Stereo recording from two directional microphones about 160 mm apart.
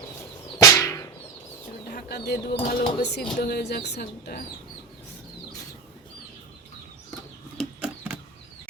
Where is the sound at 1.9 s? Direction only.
75° left (ahead or behind).